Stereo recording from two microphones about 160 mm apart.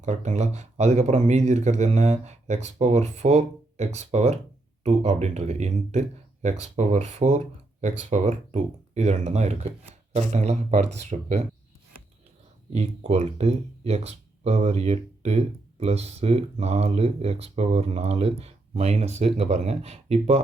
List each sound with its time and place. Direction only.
0.0 s speech: 45° right (ahead or behind)
12.7 s speech: 45° right (ahead or behind)